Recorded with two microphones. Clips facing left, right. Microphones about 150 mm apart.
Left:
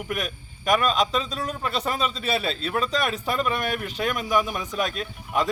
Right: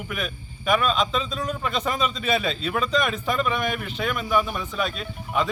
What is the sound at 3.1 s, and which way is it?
Speech, centre (ahead or behind).